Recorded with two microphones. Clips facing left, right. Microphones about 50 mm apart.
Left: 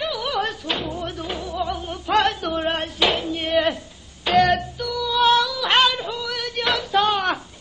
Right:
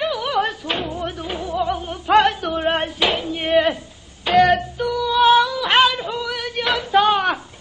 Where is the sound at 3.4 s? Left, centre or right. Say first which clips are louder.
Right 6 dB; centre.